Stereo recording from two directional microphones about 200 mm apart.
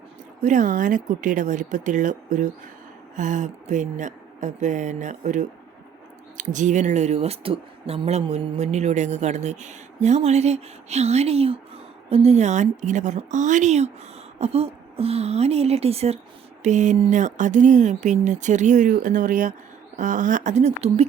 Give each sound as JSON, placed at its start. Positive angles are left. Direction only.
{"t": 0.4, "sound": "speech", "side_deg": -40}